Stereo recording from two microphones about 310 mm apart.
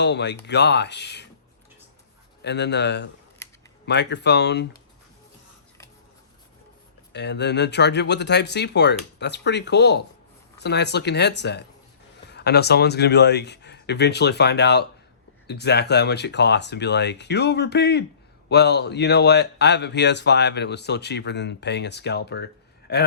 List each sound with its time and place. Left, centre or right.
0.0 s speech: left
2.4 s speech: left
7.1 s speech: left